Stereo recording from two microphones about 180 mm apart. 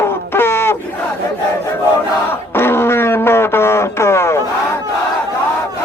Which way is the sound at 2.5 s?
15° left (ahead or behind).